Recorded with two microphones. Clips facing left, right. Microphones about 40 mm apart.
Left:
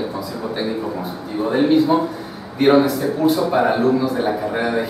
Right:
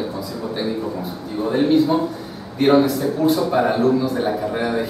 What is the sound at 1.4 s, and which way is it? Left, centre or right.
A man's voice, centre.